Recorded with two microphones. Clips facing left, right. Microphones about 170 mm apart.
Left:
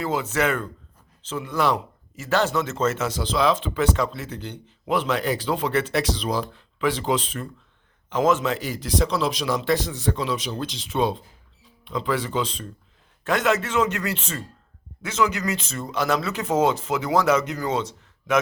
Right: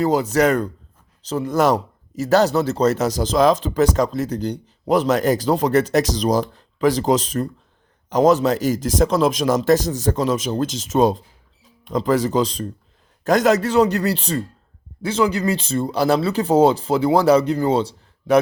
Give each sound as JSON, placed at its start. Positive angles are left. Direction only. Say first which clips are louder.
{"t": 0.0, "sound": "a man's voice", "louder": "right 7 dB", "side_deg": -40}